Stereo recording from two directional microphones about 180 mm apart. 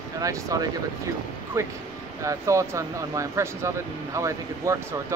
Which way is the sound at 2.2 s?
15° right (ahead or behind).